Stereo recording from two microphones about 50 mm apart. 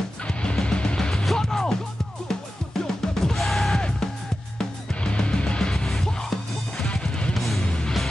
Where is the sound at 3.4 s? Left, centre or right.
Centre.